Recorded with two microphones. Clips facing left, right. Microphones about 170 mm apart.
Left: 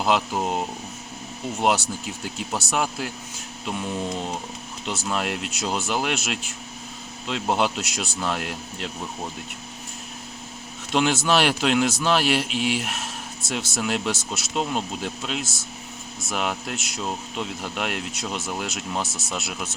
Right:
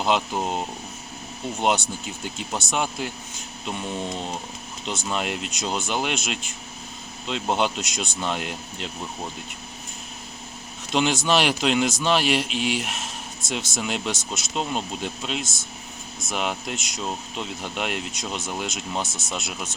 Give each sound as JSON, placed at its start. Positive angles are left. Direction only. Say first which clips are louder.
{"t": 0.0, "sound": "speech", "louder": "left 1 dB", "side_deg": 5}
{"t": 10.9, "sound": "speech", "louder": "left 1 dB", "side_deg": 5}